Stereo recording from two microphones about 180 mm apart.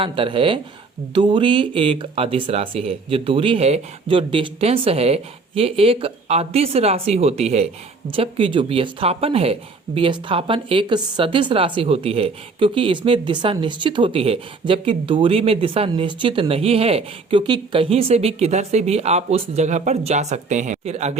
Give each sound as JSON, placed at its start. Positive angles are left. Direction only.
{"t": 0.0, "sound": "speech", "side_deg": -30}